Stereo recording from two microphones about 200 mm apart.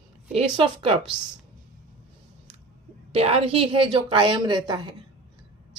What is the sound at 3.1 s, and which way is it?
A woman's voice, 30° right (ahead or behind).